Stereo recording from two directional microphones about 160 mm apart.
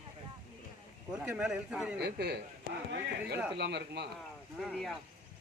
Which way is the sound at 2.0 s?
90° right.